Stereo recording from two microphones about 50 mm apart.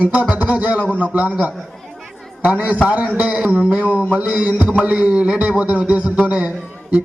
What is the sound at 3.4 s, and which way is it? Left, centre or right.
Speech, right.